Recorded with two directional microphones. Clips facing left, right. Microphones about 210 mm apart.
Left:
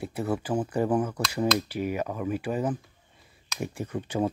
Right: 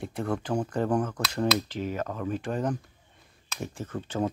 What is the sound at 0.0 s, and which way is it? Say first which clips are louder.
Speech: left 1 dB; 5° left (ahead or behind).